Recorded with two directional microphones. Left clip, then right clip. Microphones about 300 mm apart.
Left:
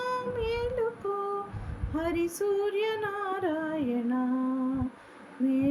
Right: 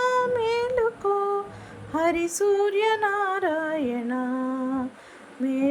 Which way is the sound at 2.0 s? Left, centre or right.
Centre.